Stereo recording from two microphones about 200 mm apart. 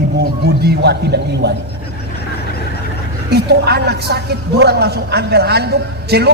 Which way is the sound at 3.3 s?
55° right (ahead or behind).